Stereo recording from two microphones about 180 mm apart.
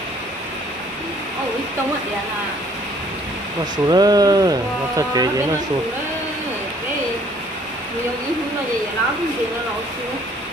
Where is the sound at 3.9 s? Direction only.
20° right (ahead or behind).